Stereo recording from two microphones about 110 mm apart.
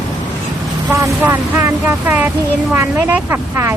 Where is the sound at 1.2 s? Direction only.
20° right (ahead or behind).